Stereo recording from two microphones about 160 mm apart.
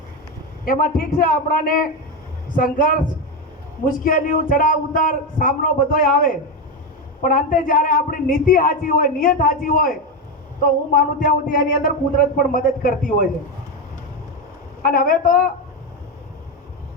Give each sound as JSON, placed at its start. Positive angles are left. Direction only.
{"t": 0.6, "sound": "a man's voice", "side_deg": 65}
{"t": 4.0, "sound": "a man's voice", "side_deg": 60}
{"t": 14.8, "sound": "a man's voice", "side_deg": 60}